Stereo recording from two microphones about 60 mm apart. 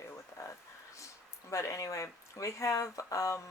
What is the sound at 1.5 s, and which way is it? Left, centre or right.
Speech, left.